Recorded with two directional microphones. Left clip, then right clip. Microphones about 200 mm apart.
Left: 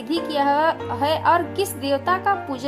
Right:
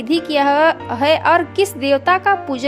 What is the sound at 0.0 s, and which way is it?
A woman's voice, 25° right (ahead or behind).